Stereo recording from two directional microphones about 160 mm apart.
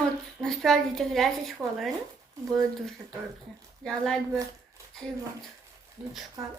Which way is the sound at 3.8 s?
5° left (ahead or behind).